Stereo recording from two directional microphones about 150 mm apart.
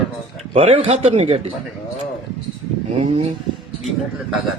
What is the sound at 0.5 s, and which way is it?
Speech, 40° right (ahead or behind).